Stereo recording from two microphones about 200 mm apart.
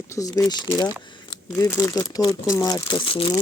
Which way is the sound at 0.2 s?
15° left (ahead or behind).